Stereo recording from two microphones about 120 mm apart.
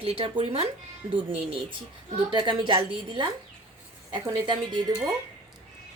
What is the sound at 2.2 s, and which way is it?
A woman's voice, 40° right (ahead or behind).